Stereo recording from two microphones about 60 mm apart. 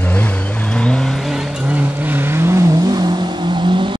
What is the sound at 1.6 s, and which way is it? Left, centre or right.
Vehicle, right.